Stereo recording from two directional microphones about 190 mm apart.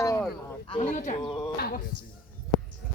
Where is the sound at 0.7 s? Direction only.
35° left (ahead or behind).